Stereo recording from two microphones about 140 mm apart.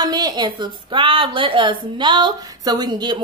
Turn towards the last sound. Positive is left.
turn(degrees=-30)  # may be behind; listen again after turning